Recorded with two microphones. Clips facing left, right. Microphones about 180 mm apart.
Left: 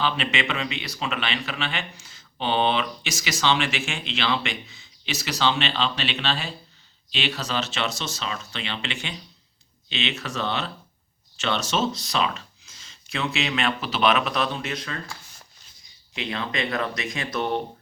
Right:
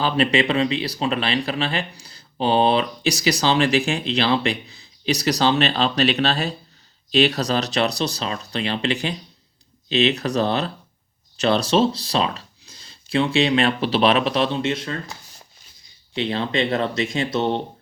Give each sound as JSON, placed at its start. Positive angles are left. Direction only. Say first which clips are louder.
{"t": 0.0, "sound": "speech", "louder": "right 7 dB", "side_deg": -35}